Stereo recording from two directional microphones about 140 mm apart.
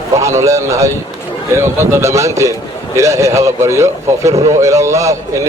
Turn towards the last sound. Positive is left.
turn(degrees=-20)  # may be behind; listen again after turning